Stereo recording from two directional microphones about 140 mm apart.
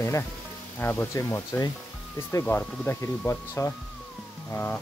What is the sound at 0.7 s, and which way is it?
Speech, 15° left (ahead or behind).